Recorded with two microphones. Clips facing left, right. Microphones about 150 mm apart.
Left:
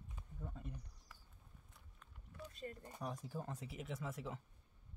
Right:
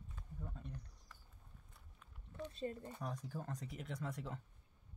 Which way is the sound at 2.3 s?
25° right (ahead or behind).